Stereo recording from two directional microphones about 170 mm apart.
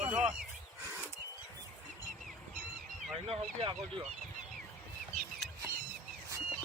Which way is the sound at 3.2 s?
30° right (ahead or behind).